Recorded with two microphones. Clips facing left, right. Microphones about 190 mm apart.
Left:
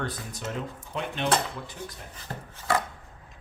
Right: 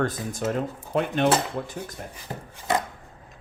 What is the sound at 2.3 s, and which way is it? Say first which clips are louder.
Chopping: right 1 dB; 15° right (ahead or behind).